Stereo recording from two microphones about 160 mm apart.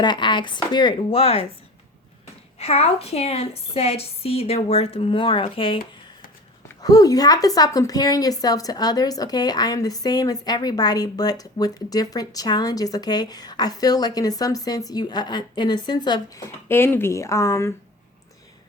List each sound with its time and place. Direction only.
0.0 s a woman's voice: 30° left (ahead or behind)
2.6 s a woman's voice: 40° left (ahead or behind)
6.8 s a woman's voice: 20° left (ahead or behind)